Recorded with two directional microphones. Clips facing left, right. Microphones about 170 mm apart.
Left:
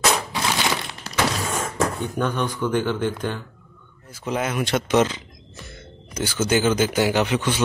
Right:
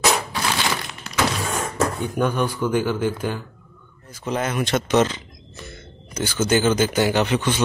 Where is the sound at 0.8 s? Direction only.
30° left (ahead or behind).